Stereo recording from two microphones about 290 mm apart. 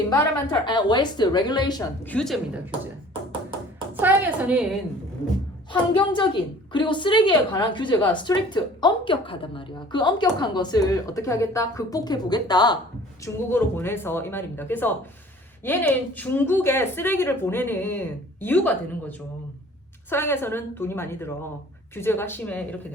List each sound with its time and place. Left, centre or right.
0.2 s a woman's voice: centre
2.1 s a woman's voice: centre
3.9 s a woman's voice: centre
5.7 s a woman's voice: centre